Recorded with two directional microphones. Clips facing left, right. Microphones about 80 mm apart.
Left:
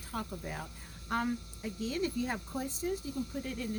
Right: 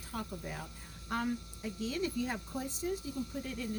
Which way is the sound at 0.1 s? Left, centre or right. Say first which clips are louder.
Left 2 dB; left.